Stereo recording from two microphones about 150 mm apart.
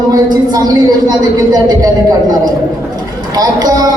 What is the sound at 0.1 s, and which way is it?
A man's voice, 25° right (ahead or behind).